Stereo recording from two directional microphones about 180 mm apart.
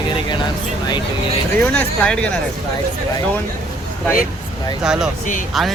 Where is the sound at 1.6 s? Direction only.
5° left (ahead or behind).